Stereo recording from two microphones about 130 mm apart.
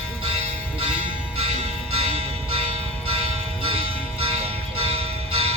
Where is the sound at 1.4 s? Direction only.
50° right (ahead or behind).